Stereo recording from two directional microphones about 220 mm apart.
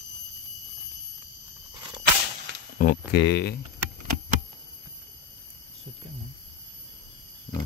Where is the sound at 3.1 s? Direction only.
50° left (ahead or behind).